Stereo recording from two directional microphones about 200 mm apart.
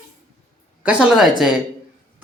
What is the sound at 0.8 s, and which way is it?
Speech, 5° right (ahead or behind).